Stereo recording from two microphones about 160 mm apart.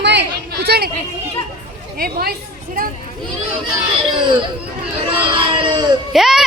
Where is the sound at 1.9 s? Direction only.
70° right (ahead or behind).